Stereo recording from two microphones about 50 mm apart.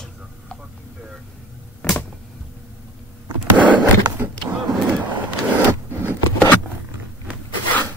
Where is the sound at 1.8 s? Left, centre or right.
Left.